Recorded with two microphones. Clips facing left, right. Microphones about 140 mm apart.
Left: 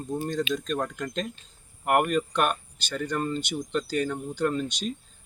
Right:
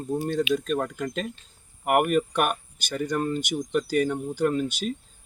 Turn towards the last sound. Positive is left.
turn(degrees=-10)  # may be behind; listen again after turning